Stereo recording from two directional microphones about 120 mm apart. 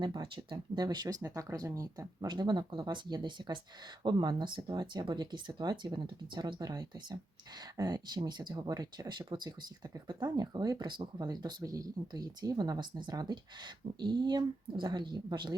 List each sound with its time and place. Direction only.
0.0 s speech: 40° right (ahead or behind)